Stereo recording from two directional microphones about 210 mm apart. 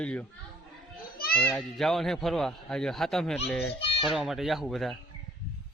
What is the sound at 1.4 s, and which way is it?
A man's voice, 5° left (ahead or behind).